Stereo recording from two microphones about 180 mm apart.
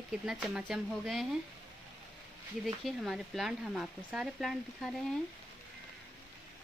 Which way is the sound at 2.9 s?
Centre (ahead or behind).